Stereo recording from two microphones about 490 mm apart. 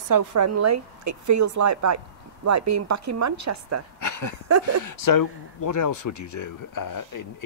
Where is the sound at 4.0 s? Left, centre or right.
Left.